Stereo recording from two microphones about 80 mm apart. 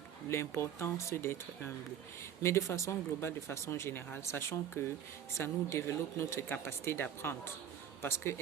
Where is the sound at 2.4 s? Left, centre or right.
Left.